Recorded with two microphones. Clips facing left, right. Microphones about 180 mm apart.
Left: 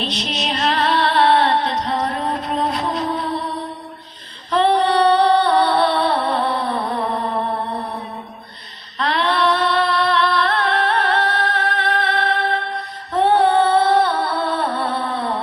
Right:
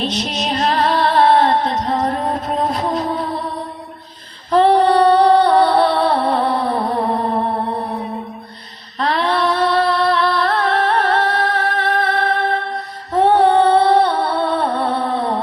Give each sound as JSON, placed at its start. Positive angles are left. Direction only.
{"t": 0.0, "sound": "music", "side_deg": -45}
{"t": 4.5, "sound": "music", "side_deg": -40}
{"t": 9.0, "sound": "a sound", "side_deg": -45}
{"t": 13.6, "sound": "music", "side_deg": -20}